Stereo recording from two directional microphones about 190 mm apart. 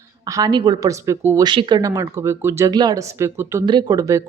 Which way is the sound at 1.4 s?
25° right (ahead or behind).